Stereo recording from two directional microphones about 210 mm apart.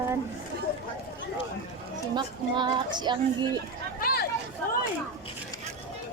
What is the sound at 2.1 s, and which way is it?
Speech, 20° right (ahead or behind).